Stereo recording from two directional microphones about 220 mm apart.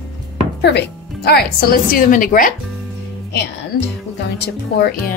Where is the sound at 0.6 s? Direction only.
50° left (ahead or behind).